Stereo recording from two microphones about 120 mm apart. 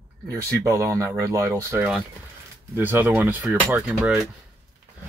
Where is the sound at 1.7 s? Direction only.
5° right (ahead or behind).